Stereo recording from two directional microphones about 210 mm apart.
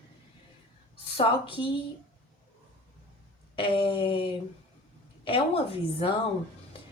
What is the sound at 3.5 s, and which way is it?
Speech, 25° left (ahead or behind).